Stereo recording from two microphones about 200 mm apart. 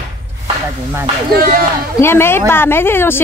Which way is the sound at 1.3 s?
45° right (ahead or behind).